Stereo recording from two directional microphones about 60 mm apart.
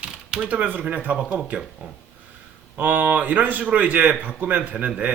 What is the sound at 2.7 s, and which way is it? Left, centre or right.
Speech, right.